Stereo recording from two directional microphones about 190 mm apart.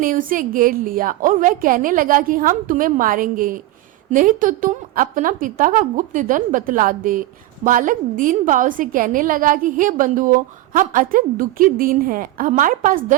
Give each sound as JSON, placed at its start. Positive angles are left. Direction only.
{"t": 0.0, "sound": "a woman's voice", "side_deg": -45}